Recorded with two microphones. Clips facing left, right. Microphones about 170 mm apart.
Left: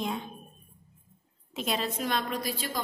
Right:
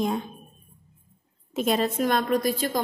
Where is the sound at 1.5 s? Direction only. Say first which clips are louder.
Right 8 dB; 50° right (ahead or behind).